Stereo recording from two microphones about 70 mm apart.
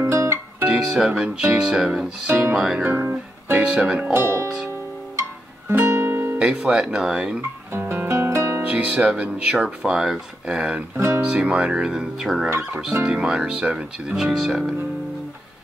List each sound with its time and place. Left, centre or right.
0.1 s music: right
0.7 s speech: centre
2.5 s music: centre
2.8 s music: right
3.6 s speech: centre
4.1 s speech: right
5.9 s guitar: right
6.4 s speech: centre
7.7 s music: right
8.6 s music: right
9.1 s speech: centre
12.4 s speech: right
13.0 s speech: centre